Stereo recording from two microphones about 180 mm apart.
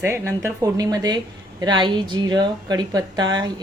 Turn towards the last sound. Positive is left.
turn(degrees=-20)  # may be behind; listen again after turning